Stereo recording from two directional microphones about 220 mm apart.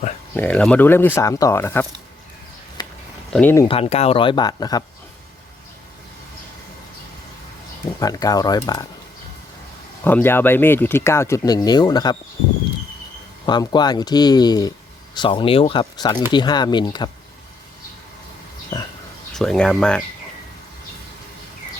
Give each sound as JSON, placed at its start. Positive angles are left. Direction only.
{"t": 0.3, "sound": "speech", "side_deg": 5}
{"t": 2.8, "sound": "a sound", "side_deg": 20}
{"t": 3.3, "sound": "speech", "side_deg": 10}
{"t": 3.7, "sound": "speech", "side_deg": 30}
{"t": 7.9, "sound": "speech", "side_deg": 15}
{"t": 10.0, "sound": "speech", "side_deg": 10}
{"t": 13.4, "sound": "speech", "side_deg": 20}
{"t": 19.3, "sound": "speech", "side_deg": 5}